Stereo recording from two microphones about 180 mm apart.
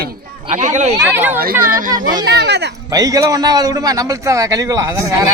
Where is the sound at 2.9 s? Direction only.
20° right (ahead or behind).